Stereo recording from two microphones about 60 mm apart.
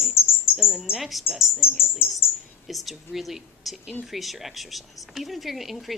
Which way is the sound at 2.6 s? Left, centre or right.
Centre.